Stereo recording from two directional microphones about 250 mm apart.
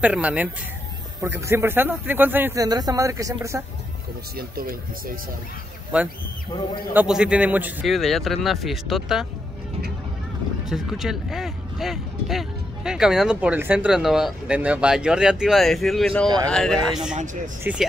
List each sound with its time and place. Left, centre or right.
0.0 s speech: centre
4.4 s speech: right
5.9 s speech: centre
10.6 s speech: centre
17.1 s speech: right
17.7 s speech: centre